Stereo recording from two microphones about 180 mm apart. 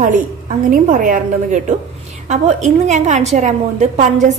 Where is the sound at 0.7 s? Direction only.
45° right (ahead or behind).